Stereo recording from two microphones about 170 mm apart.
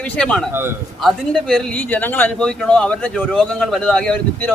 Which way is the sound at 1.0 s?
5° left (ahead or behind).